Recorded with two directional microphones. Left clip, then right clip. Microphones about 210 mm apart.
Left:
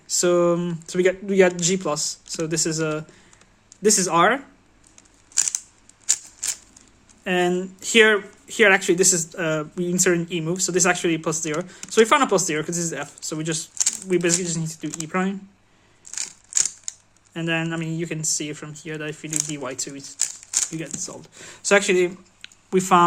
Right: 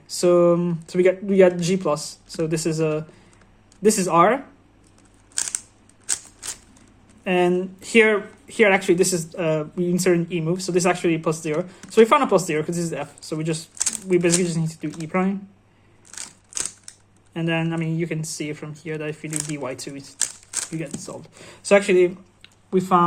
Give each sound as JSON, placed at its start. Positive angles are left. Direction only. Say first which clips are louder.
{"t": 0.1, "sound": "speech", "louder": "right 2 dB", "side_deg": 15}
{"t": 7.3, "sound": "speech", "louder": "right 2 dB", "side_deg": 10}
{"t": 17.3, "sound": "speech", "louder": "even", "side_deg": 15}
{"t": 22.7, "sound": "speech", "louder": "left 2 dB", "side_deg": 30}